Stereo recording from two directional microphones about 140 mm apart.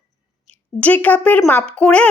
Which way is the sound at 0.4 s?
10° left (ahead or behind).